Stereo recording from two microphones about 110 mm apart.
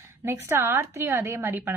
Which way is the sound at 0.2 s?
25° right (ahead or behind).